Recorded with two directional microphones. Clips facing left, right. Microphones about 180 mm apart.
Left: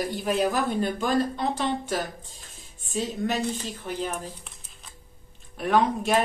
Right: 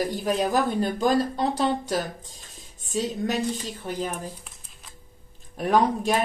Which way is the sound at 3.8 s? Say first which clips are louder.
Right 1 dB; 40° right (ahead or behind).